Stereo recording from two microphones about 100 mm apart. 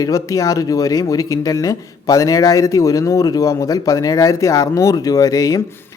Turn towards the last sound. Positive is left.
turn(degrees=35)  # may be behind; listen again after turning